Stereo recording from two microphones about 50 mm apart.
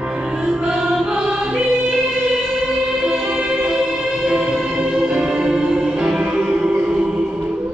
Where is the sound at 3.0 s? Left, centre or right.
Centre.